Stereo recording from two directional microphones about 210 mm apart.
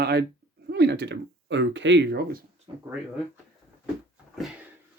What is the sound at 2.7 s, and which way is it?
Speech, 25° right (ahead or behind).